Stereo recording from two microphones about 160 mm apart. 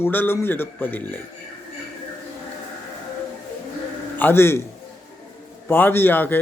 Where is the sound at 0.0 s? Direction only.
15° left (ahead or behind).